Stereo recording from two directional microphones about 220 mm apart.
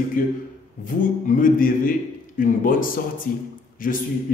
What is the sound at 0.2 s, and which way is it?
Speech, 40° left (ahead or behind).